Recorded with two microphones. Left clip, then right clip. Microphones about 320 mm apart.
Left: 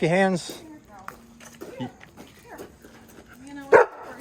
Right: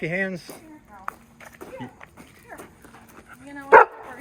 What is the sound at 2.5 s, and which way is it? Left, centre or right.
Horse, centre.